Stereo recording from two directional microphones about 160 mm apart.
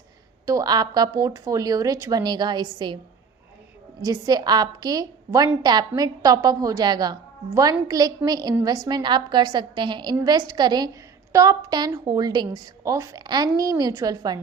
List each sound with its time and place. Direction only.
0.4 s a woman's voice: 20° right (ahead or behind)
4.0 s a woman's voice: 25° right (ahead or behind)